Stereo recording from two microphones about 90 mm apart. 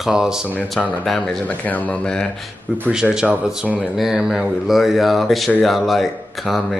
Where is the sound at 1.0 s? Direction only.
5° left (ahead or behind).